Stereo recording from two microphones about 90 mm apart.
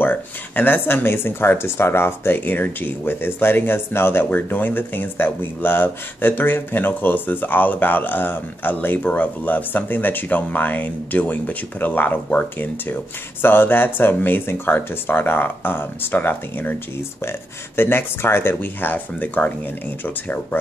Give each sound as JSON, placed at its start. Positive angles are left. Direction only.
{"t": 0.0, "sound": "speech", "side_deg": 20}